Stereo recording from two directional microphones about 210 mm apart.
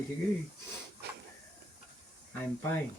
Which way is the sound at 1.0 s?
50° right (ahead or behind).